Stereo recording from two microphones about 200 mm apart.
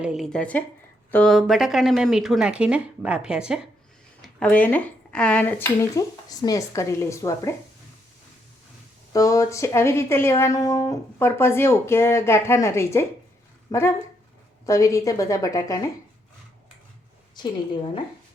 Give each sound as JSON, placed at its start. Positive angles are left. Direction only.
{"t": 0.0, "sound": "speech", "side_deg": 0}
{"t": 4.2, "sound": "speech", "side_deg": 5}
{"t": 9.1, "sound": "a woman's voice", "side_deg": 15}
{"t": 17.4, "sound": "a woman's voice", "side_deg": 20}